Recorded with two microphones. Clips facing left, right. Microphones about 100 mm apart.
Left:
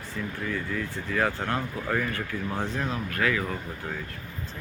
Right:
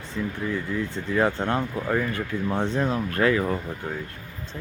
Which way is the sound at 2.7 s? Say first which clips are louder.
Right 5 dB; 30° right (ahead or behind).